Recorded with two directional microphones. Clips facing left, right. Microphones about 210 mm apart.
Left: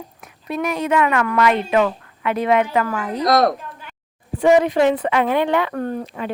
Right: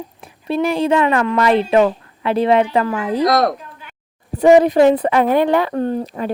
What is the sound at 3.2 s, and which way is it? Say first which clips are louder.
Speech: even; centre (ahead or behind).